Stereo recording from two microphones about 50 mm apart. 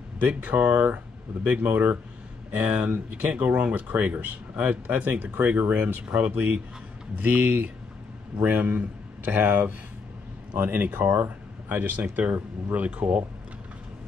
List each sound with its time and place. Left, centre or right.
0.2 s speech: right
10.5 s speech: right